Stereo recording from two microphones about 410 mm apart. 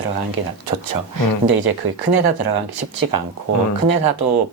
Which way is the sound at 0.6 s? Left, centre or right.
Right.